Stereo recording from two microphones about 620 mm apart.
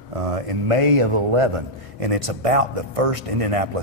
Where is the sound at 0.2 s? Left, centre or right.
Right.